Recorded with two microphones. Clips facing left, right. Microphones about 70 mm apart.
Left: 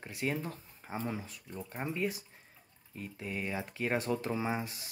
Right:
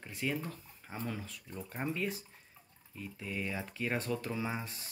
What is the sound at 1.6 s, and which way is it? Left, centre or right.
Speech, centre.